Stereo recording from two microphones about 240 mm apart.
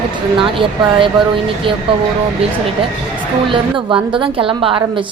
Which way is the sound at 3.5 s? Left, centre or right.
Right.